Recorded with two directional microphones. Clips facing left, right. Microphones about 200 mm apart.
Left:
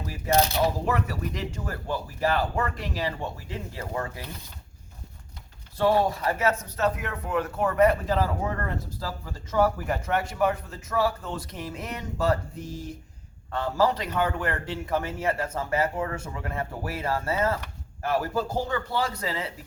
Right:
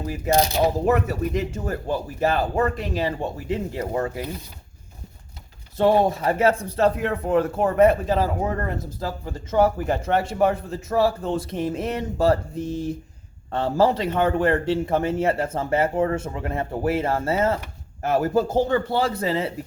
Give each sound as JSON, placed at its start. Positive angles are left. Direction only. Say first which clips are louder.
{"t": 0.6, "sound": "speech", "louder": "right 6 dB", "side_deg": -25}
{"t": 5.7, "sound": "speech", "louder": "right 4 dB", "side_deg": -20}